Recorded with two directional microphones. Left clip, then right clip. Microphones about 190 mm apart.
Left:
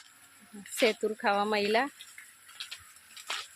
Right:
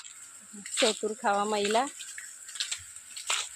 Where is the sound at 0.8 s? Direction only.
15° left (ahead or behind).